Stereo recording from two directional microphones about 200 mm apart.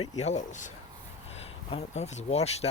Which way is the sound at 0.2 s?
35° left (ahead or behind).